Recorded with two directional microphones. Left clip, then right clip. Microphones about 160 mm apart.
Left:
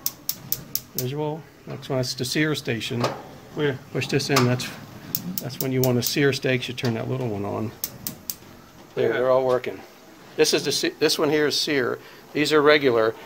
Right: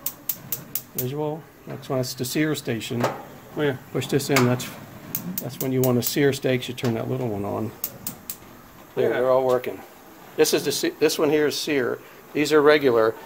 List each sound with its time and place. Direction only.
0.9 s speech: 10° right (ahead or behind)
3.9 s speech: 25° right (ahead or behind); by 7.7 s 10° right (ahead or behind)
9.2 s speech: 10° right (ahead or behind)